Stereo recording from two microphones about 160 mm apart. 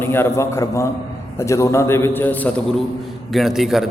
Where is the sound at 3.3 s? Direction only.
Centre (ahead or behind).